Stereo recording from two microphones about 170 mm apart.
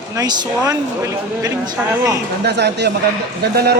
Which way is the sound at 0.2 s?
20° right (ahead or behind).